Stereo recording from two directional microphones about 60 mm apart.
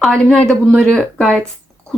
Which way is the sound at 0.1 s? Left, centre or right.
Centre.